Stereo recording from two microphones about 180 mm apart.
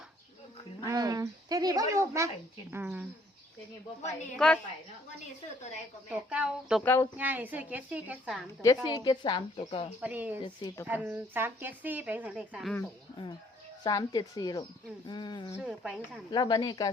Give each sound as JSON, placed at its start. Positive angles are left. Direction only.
{"t": 0.9, "sound": "a woman's voice", "side_deg": -20}
{"t": 4.4, "sound": "speech", "side_deg": 5}
{"t": 6.1, "sound": "speech", "side_deg": -5}
{"t": 6.8, "sound": "speech", "side_deg": 10}
{"t": 7.2, "sound": "a woman's voice", "side_deg": -10}
{"t": 8.6, "sound": "a woman's voice", "side_deg": 20}
{"t": 10.0, "sound": "a woman's voice", "side_deg": -10}
{"t": 10.4, "sound": "a woman's voice", "side_deg": 25}
{"t": 10.8, "sound": "a woman's voice", "side_deg": -10}
{"t": 13.8, "sound": "a woman's voice", "side_deg": 20}
{"t": 15.6, "sound": "speech", "side_deg": 0}
{"t": 16.3, "sound": "a woman's voice", "side_deg": 25}